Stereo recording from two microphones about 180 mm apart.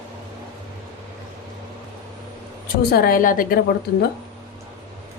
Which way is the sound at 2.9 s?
55° left (ahead or behind).